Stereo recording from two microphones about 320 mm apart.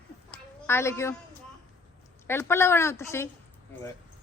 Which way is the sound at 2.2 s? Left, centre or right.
Centre.